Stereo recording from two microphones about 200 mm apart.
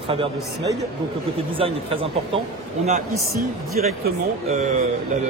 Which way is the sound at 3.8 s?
40° right (ahead or behind).